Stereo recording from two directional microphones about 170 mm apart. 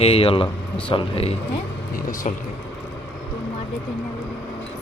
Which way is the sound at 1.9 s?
55° left (ahead or behind).